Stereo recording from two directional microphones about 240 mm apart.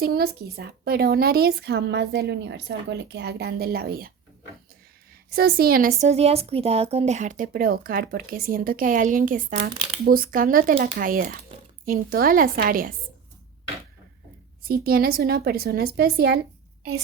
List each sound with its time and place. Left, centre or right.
0.0 s speech: right
5.3 s speech: right
6.0 s speech: right
14.6 s speech: right